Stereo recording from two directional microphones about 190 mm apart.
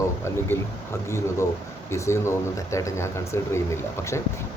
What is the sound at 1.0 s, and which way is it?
Speech, 15° left (ahead or behind).